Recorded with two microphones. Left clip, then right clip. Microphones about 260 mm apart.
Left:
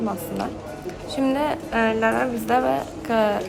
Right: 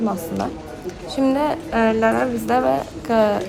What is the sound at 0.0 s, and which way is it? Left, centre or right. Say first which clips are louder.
A woman's voice: right 3 dB; centre.